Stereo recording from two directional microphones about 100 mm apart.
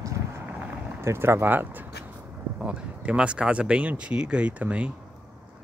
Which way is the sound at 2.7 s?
10° right (ahead or behind).